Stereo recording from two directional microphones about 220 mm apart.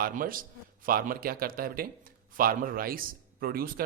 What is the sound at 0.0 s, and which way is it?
A man's voice, 40° right (ahead or behind).